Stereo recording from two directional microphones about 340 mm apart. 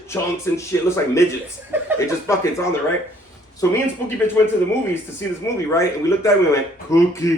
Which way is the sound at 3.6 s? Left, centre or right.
Centre.